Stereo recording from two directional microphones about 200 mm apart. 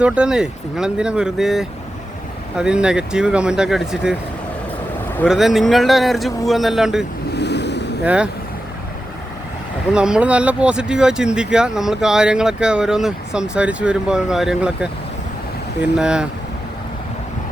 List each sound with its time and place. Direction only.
0.0 s speech: 5° right (ahead or behind)
5.3 s speech: centre (ahead or behind)
7.3 s waves: 60° left (ahead or behind)
8.0 s speech: 5° right (ahead or behind)
9.9 s speech: 5° right (ahead or behind)